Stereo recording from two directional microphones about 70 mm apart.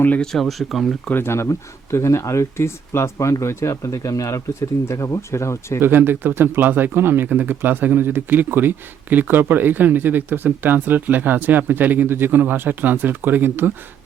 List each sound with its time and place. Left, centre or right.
0.2 s speech: centre
1.1 s speech: left
5.8 s speech: right